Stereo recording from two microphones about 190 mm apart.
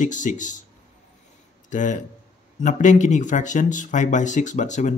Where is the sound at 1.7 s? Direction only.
40° left (ahead or behind).